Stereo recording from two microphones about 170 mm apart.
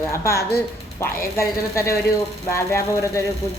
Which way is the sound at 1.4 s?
15° left (ahead or behind).